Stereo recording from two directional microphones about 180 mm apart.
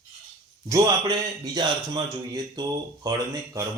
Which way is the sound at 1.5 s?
25° right (ahead or behind).